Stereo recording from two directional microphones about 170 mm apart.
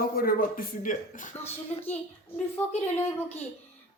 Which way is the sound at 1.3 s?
15° left (ahead or behind).